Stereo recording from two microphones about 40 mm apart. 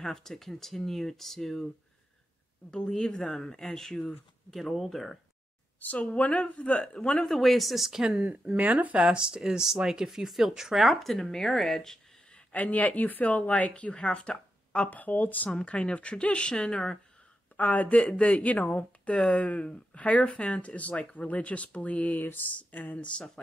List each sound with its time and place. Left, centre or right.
0.0 s speech: centre
3.1 s speech: centre
5.8 s a woman's voice: left
7.2 s speech: centre
8.2 s speech: right
9.6 s speech: centre
12.5 s speech: left
14.7 s speech: left
15.5 s speech: left
17.6 s speech: left
22.2 s speech: left
22.6 s speech: left
23.1 s speech: left